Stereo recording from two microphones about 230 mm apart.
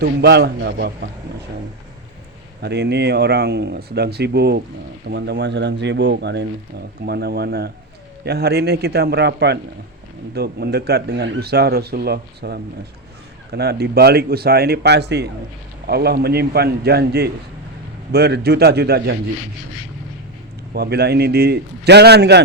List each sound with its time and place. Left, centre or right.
0.0 s speech: right
2.6 s speech: right
20.7 s speech: right